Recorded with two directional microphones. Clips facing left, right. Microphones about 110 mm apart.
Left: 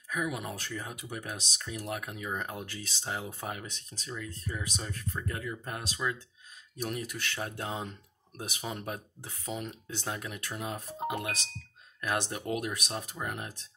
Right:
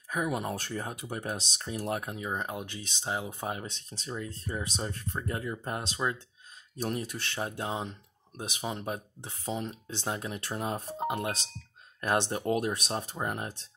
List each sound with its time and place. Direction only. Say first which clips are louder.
0.1 s speech: right 3 dB; 35° right (ahead or behind)